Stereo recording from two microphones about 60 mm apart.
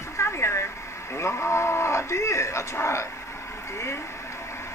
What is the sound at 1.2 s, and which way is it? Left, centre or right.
Speech, left.